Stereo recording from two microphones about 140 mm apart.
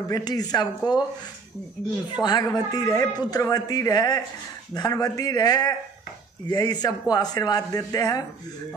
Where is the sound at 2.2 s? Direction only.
30° left (ahead or behind).